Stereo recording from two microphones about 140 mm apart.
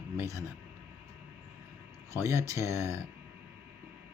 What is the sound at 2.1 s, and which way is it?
Speech, 20° right (ahead or behind).